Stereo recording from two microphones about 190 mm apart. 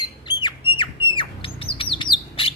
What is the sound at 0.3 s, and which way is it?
Squawk, 25° left (ahead or behind).